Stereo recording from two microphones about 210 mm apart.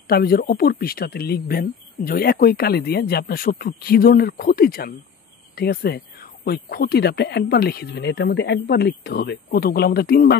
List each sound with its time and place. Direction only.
0.0 s speech: 45° left (ahead or behind)